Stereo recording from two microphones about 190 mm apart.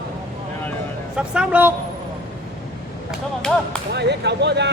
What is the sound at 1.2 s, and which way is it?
Speech, 5° right (ahead or behind).